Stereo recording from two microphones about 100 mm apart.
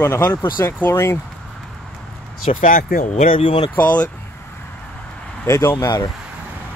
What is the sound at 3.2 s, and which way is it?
Speech, 75° left (ahead or behind).